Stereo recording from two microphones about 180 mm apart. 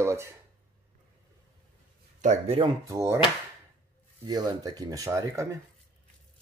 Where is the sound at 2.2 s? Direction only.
35° right (ahead or behind).